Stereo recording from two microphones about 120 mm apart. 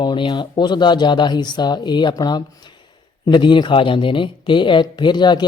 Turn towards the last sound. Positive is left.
turn(degrees=40)  # may be behind; listen again after turning